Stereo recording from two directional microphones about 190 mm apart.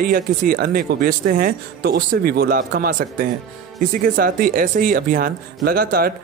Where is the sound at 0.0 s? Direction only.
50° right (ahead or behind).